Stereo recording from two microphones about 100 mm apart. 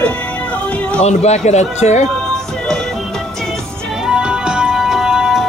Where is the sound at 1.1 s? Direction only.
90° left.